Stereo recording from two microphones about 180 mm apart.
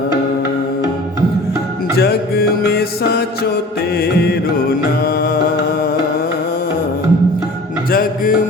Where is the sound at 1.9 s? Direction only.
60° left (ahead or behind).